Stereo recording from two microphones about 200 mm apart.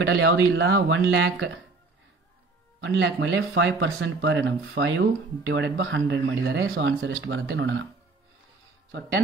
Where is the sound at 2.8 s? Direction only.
65° right (ahead or behind).